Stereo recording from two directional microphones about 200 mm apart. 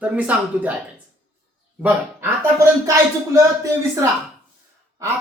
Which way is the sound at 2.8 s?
15° right (ahead or behind).